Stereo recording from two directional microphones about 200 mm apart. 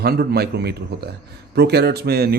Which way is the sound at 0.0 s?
50° right (ahead or behind).